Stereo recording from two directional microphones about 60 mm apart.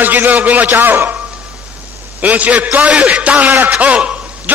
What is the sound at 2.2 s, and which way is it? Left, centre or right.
A man's voice, right.